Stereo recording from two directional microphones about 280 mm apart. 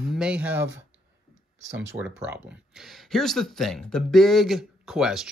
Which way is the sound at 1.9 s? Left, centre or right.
Centre.